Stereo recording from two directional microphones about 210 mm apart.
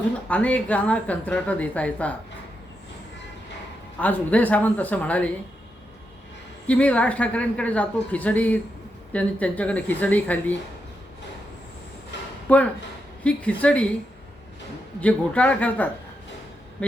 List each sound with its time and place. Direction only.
0.3 s a woman's voice: 5° left (ahead or behind)
4.0 s a woman's voice: 10° left (ahead or behind)
6.7 s a woman's voice: 5° left (ahead or behind)
12.1 s a sound: 55° left (ahead or behind)
12.5 s a woman's voice: 5° left (ahead or behind)
15.0 s a woman's voice: 5° left (ahead or behind)